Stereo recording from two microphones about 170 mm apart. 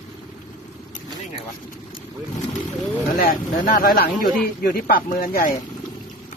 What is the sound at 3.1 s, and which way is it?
Speech, 55° left (ahead or behind).